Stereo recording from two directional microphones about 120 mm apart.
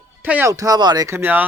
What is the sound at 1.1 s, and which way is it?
Speech, 15° right (ahead or behind).